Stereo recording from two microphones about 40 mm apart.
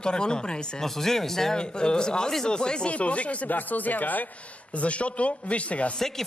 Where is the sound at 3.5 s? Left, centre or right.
Left.